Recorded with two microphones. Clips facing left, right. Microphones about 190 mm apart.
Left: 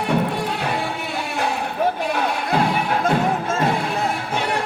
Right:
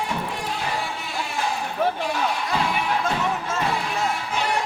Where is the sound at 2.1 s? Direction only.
55° left (ahead or behind).